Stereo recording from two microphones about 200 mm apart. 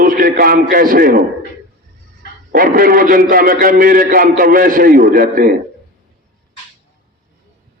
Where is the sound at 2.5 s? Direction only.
45° right (ahead or behind).